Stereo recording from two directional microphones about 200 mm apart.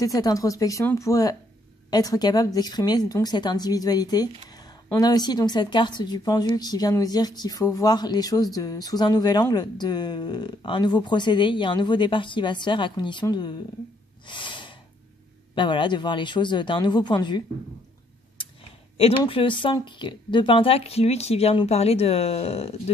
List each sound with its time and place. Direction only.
0.0 s speech: 15° left (ahead or behind)
14.2 s gasp: 25° left (ahead or behind)
15.5 s speech: 25° left (ahead or behind)
18.9 s speech: 30° left (ahead or behind)